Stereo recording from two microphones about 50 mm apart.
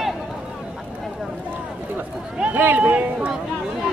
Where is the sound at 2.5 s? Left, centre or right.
Right.